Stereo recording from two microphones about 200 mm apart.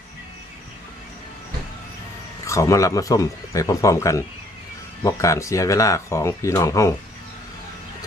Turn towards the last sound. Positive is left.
turn(degrees=15)  # may be behind; listen again after turning